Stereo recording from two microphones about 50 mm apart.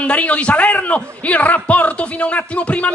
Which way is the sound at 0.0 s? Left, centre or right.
Left.